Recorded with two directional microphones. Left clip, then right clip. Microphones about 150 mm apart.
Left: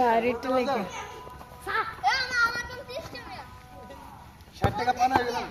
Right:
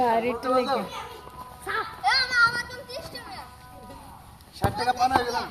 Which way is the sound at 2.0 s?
45° left (ahead or behind).